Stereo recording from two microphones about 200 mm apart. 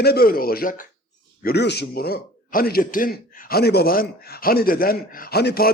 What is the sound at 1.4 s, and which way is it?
A man's voice, 55° left (ahead or behind).